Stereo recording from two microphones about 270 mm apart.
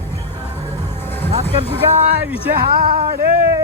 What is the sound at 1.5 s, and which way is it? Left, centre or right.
Speech, right.